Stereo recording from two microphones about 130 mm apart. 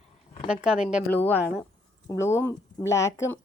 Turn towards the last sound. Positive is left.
turn(degrees=20)  # may be behind; listen again after turning